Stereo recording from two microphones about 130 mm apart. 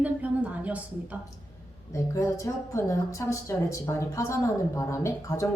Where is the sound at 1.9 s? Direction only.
25° left (ahead or behind).